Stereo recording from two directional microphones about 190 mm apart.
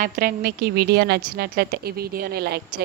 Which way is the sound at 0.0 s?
50° right (ahead or behind).